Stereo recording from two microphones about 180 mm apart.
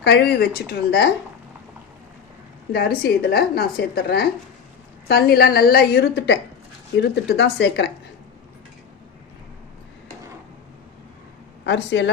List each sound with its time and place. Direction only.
0.0 s a woman's voice: 65° left (ahead or behind)
2.7 s a woman's voice: 55° left (ahead or behind)
5.3 s a woman's voice: 55° left (ahead or behind)
11.6 s speech: 80° left